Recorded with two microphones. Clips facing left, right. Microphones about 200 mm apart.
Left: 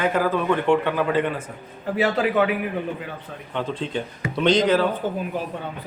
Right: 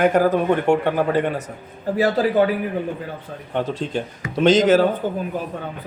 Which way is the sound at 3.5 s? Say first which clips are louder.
Right 3 dB; 45° right (ahead or behind).